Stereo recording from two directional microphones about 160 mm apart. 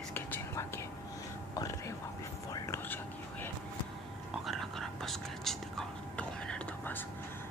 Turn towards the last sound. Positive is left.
turn(degrees=10)  # may be behind; listen again after turning